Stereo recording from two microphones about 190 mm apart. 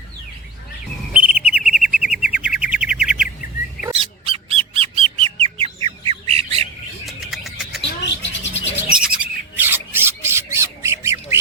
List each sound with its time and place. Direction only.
1.1 s bird: 5° right (ahead or behind)
4.3 s bird: 30° right (ahead or behind)
7.0 s a sound: centre (ahead or behind)
8.0 s bird: 70° left (ahead or behind)
9.0 s bird: 5° right (ahead or behind)